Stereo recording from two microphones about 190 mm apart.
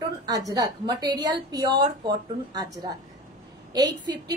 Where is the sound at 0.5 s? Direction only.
20° right (ahead or behind).